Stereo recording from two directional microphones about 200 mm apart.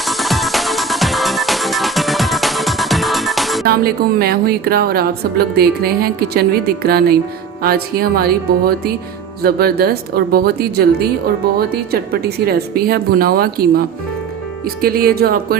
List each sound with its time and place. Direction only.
0.0 s music: centre (ahead or behind)
3.7 s a woman's voice: 50° right (ahead or behind)